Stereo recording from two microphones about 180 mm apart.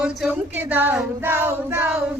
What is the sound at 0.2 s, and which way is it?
Child singing, 10° right (ahead or behind).